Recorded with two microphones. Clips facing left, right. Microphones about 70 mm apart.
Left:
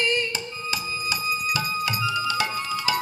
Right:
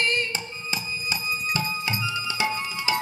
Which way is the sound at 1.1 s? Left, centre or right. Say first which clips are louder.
Left 2 dB; right.